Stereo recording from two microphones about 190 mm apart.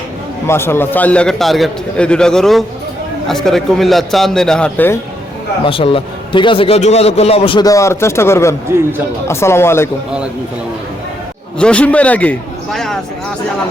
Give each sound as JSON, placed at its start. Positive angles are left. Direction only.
{"t": 0.4, "sound": "a man's voice", "side_deg": 15}
{"t": 5.6, "sound": "a man's voice", "side_deg": 30}
{"t": 11.6, "sound": "a man's voice", "side_deg": 5}